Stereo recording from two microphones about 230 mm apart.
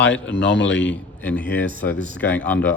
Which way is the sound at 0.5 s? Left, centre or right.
Left.